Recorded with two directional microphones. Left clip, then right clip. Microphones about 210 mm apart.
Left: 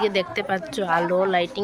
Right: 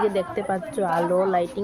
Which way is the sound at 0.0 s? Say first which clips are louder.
Left 1 dB; 45° left (ahead or behind).